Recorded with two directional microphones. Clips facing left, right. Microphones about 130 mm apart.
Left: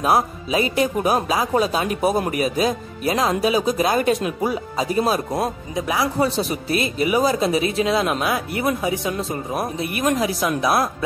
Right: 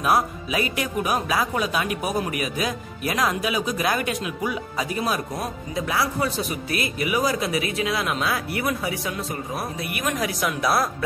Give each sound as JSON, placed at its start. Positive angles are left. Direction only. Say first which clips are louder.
{"t": 0.0, "sound": "speech", "louder": "left 3 dB", "side_deg": 25}
{"t": 5.8, "sound": "speech", "louder": "left 4 dB", "side_deg": 20}
{"t": 6.3, "sound": "speech", "louder": "left 5 dB", "side_deg": 30}